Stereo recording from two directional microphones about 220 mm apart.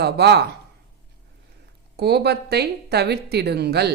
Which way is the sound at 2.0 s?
45° right (ahead or behind).